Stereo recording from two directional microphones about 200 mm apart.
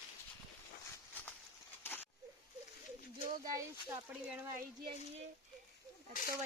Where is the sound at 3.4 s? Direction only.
15° right (ahead or behind).